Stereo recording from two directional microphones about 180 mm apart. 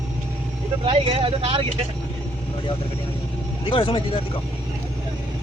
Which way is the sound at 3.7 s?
30° left (ahead or behind).